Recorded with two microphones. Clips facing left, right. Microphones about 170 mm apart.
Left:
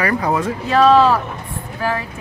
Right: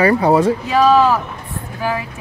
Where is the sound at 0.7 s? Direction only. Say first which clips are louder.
Left 2 dB; 5° right (ahead or behind).